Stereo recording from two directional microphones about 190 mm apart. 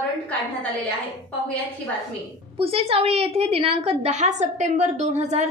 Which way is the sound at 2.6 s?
30° right (ahead or behind).